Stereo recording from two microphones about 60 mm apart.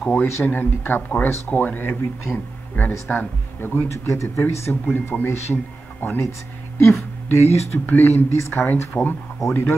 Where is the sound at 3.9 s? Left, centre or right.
Left.